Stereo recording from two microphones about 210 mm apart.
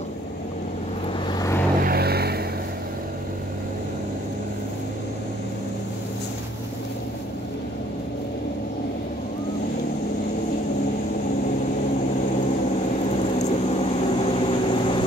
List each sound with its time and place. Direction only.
1.8 s vehicle: 45° right (ahead or behind)
13.2 s vehicle: 30° left (ahead or behind)